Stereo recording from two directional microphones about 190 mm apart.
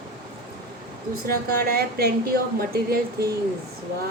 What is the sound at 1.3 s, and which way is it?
A woman's voice, 55° right (ahead or behind).